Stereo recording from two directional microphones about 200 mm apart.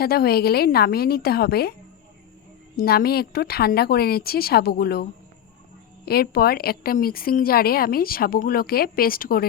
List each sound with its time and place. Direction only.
0.0 s a woman's voice: 50° left (ahead or behind)
2.7 s a woman's voice: 50° left (ahead or behind)
6.1 s a woman's voice: 50° left (ahead or behind)